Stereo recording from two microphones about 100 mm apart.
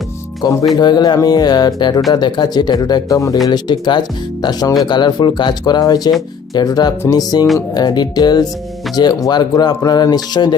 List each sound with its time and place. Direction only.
0.4 s speech: 45° left (ahead or behind)